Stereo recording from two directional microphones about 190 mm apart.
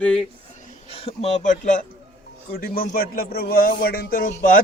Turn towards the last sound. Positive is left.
turn(degrees=45)  # may be behind; listen again after turning